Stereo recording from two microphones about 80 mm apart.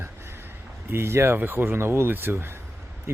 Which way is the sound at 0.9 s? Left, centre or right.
Right.